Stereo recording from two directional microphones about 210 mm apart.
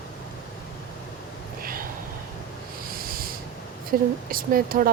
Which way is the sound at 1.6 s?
45° right (ahead or behind).